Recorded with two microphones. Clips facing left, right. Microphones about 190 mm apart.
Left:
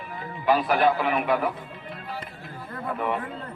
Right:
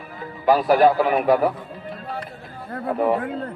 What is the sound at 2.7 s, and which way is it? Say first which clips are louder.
Speech: right 7 dB; 40° right (ahead or behind).